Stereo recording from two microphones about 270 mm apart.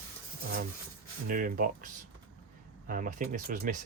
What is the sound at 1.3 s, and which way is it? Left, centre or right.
Speech, right.